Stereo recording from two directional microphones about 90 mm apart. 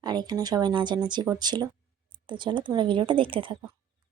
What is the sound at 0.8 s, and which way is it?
Speech, 55° right (ahead or behind).